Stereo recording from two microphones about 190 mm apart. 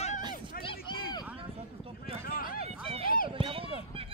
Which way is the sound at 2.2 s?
50° left (ahead or behind).